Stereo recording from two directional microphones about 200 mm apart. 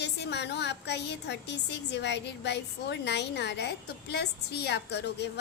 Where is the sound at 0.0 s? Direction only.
60° left (ahead or behind).